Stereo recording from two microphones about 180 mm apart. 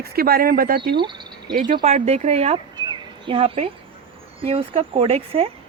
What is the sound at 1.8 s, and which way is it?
Speech, 35° right (ahead or behind).